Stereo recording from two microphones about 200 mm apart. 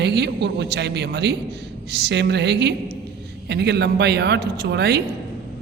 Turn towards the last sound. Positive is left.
turn(degrees=-55)  # may be behind; listen again after turning